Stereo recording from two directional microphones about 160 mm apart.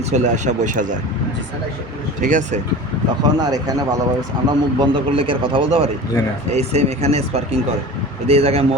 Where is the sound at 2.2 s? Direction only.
55° right (ahead or behind).